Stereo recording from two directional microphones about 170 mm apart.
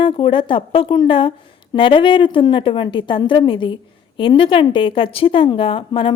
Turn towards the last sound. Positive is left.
turn(degrees=30)  # may be behind; listen again after turning